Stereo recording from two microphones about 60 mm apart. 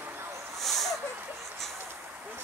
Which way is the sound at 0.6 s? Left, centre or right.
Centre.